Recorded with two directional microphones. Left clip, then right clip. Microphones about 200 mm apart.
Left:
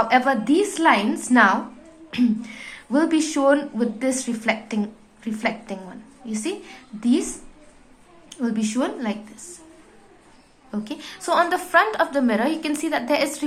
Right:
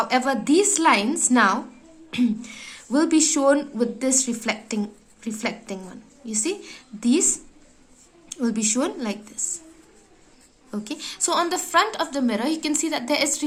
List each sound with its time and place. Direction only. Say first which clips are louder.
0.0 s a woman's voice: left 3 dB; 30° right (ahead or behind)
8.3 s a woman's voice: right 1 dB; 30° right (ahead or behind)
10.7 s a woman's voice: even; 30° right (ahead or behind)